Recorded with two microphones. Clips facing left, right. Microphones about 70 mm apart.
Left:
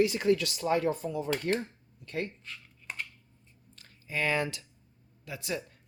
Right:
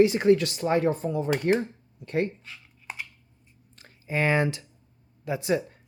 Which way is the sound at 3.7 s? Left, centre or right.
Right.